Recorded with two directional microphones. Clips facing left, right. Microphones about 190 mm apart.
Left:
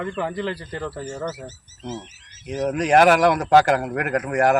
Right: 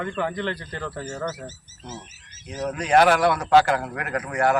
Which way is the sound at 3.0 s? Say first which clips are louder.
Left 3 dB; 45° left (ahead or behind).